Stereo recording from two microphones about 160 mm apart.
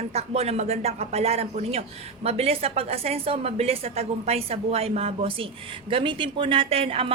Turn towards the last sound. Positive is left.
turn(degrees=-40)  # may be behind; listen again after turning